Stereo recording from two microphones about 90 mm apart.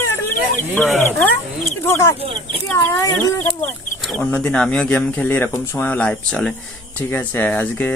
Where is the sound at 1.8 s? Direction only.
30° left (ahead or behind).